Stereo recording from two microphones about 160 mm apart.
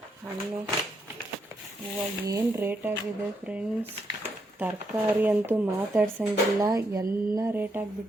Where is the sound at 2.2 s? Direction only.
20° right (ahead or behind).